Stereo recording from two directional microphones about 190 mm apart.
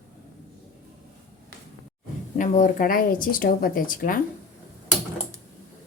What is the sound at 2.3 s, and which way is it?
Speech, 40° left (ahead or behind).